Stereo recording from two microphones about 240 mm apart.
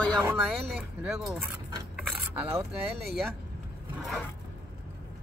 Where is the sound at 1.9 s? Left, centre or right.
Centre.